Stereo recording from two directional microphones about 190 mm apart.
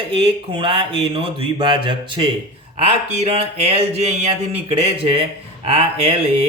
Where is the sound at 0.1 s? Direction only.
30° right (ahead or behind).